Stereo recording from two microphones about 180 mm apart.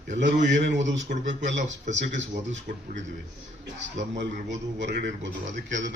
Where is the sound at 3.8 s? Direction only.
90° right.